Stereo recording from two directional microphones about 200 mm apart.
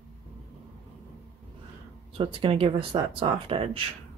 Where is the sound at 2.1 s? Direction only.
25° right (ahead or behind).